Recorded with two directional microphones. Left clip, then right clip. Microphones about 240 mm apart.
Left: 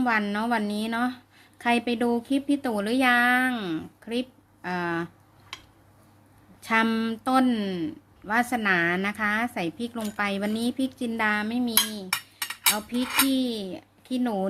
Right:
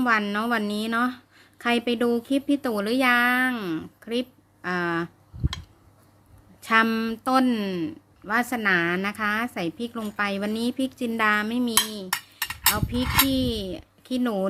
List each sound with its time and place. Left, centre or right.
0.0 s speech: centre
6.6 s speech: centre
12.1 s a sound: centre
12.7 s speech: centre